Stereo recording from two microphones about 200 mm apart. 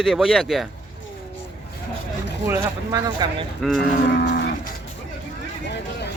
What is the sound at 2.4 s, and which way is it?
Speech, 15° right (ahead or behind).